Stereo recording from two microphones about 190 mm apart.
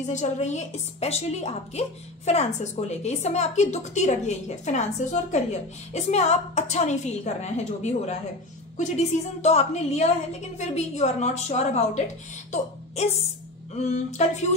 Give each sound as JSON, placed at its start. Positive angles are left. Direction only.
{"t": 0.0, "sound": "a woman's voice", "side_deg": 40}